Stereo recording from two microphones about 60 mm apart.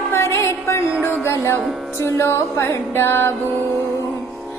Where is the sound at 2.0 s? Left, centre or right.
Left.